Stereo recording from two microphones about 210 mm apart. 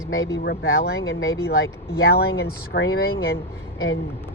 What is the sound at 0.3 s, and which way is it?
Speech, 55° left (ahead or behind).